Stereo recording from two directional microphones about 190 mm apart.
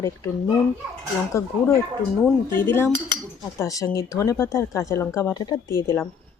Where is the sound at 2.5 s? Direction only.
10° left (ahead or behind).